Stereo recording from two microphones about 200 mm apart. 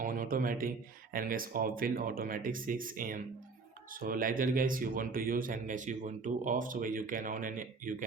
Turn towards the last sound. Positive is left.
turn(degrees=-40)  # may be behind; listen again after turning